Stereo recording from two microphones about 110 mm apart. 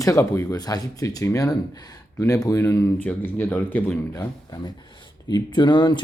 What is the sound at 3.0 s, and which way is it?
Speech, 15° left (ahead or behind).